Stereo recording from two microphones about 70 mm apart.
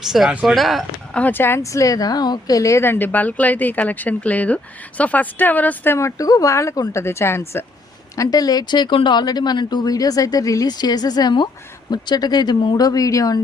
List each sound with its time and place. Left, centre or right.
0.0 s speech: centre
1.3 s speech: left
1.6 s speech: left
2.8 s speech: left
6.0 s speech: left
8.1 s speech: left